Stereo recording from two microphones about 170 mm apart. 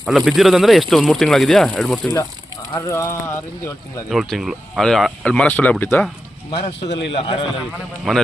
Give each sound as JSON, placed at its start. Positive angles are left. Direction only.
{"t": 0.0, "sound": "speech", "side_deg": 0}
{"t": 2.7, "sound": "speech", "side_deg": 15}
{"t": 4.1, "sound": "speech", "side_deg": 0}
{"t": 6.5, "sound": "speech", "side_deg": 35}